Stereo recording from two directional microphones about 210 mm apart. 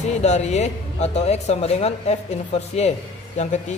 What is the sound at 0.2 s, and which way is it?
Speech, 30° left (ahead or behind).